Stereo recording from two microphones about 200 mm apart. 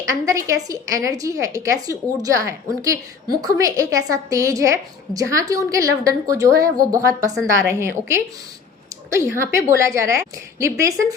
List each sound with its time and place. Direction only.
0.1 s a woman's voice: 15° right (ahead or behind)